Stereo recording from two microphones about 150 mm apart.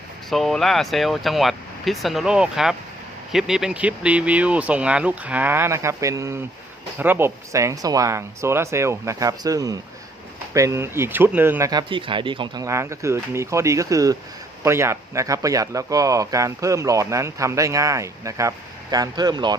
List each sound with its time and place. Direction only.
0.3 s speech: centre (ahead or behind); by 11.7 s 15° right (ahead or behind)
11.7 s speech: 30° right (ahead or behind)
12.6 s speech: 20° right (ahead or behind)